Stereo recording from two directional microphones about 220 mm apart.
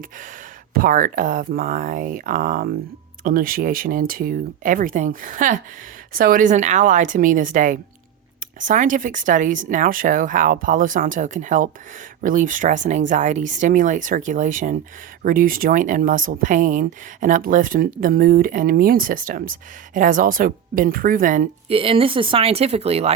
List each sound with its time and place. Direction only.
0.7 s speech: 40° right (ahead or behind)